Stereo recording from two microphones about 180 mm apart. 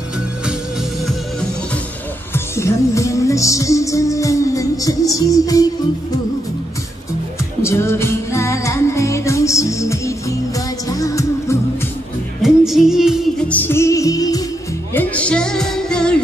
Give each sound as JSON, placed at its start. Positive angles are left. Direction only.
{"t": 2.3, "sound": "music", "side_deg": 15}
{"t": 7.6, "sound": "music", "side_deg": 15}
{"t": 12.4, "sound": "music", "side_deg": 0}
{"t": 13.5, "sound": "music", "side_deg": 10}
{"t": 15.0, "sound": "music", "side_deg": 5}